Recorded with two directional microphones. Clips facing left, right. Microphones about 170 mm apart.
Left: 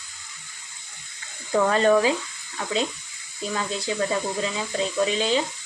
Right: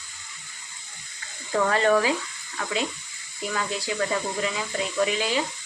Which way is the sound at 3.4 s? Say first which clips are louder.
Left 1 dB; 25° left (ahead or behind).